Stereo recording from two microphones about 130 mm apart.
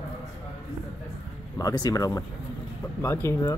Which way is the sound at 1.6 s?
30° left (ahead or behind).